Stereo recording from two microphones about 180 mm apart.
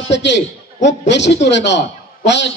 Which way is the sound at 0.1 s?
75° left (ahead or behind).